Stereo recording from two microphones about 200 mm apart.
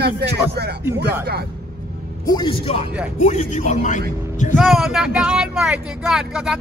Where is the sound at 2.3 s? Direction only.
25° left (ahead or behind).